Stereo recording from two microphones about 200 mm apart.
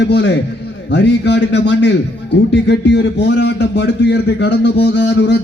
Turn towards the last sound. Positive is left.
turn(degrees=60)  # may be behind; listen again after turning